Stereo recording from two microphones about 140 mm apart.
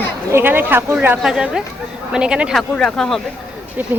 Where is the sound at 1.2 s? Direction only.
5° right (ahead or behind).